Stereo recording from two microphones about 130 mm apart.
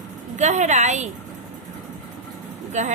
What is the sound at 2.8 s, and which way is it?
Speech, 65° right (ahead or behind).